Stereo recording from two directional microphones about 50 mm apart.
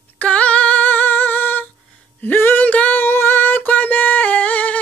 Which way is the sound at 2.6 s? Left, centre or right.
Left.